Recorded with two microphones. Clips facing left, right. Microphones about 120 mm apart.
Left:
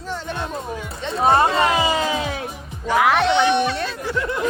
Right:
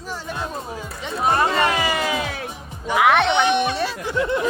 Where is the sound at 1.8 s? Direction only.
25° left (ahead or behind).